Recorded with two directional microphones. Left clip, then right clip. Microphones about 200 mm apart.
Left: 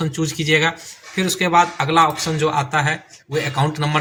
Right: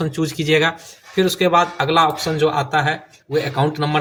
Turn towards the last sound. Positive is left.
turn(degrees=-45)  # may be behind; listen again after turning